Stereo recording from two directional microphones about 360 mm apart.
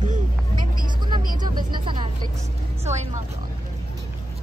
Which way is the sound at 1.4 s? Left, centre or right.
Centre.